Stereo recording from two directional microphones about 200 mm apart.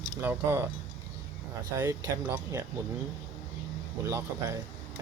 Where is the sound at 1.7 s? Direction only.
10° right (ahead or behind).